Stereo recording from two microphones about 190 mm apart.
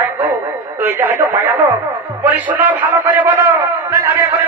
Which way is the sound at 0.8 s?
15° right (ahead or behind).